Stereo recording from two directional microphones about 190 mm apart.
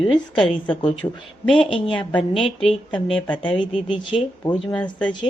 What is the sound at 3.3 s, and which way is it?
Speech, 25° left (ahead or behind).